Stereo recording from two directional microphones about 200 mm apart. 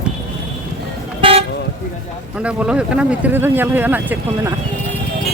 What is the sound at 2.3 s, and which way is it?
Speech, 5° right (ahead or behind).